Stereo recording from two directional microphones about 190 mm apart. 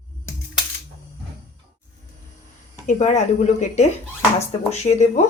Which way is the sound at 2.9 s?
40° left (ahead or behind).